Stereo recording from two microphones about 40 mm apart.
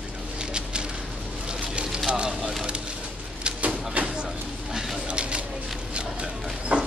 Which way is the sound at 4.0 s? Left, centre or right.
Right.